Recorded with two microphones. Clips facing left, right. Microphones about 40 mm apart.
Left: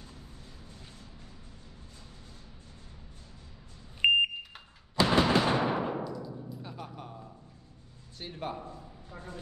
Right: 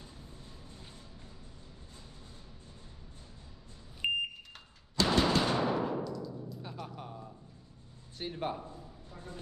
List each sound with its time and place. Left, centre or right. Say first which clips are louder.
4.0 s smoke detector: left 9 dB; left
4.9 s a sound: left 3 dB; centre
5.5 s timpani: left 2 dB; left
8.2 s a man's voice: right 2 dB; centre